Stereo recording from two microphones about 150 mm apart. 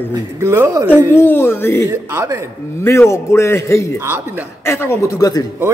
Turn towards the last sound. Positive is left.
turn(degrees=25)  # may be behind; listen again after turning